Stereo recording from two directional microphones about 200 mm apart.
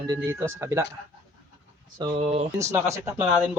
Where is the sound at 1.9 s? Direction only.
30° right (ahead or behind).